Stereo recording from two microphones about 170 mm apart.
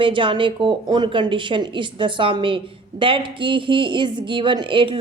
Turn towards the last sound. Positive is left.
turn(degrees=-30)  # may be behind; listen again after turning